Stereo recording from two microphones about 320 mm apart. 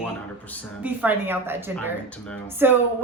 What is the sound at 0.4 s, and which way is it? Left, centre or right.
A woman's voice, centre.